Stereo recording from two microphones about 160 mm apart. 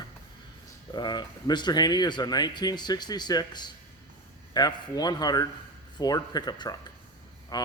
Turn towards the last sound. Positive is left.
turn(degrees=25)  # may be behind; listen again after turning